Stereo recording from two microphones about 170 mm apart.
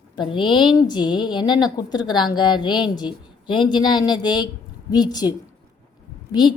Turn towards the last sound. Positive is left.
turn(degrees=25)  # may be behind; listen again after turning